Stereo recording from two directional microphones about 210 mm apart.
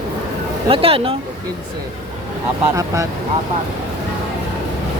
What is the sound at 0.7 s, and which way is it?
Speech, 25° right (ahead or behind).